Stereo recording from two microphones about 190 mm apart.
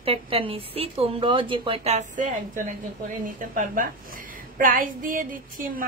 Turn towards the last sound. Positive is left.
turn(degrees=-45)  # may be behind; listen again after turning